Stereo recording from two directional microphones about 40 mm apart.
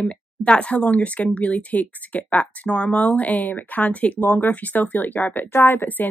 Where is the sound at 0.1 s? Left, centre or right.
Left.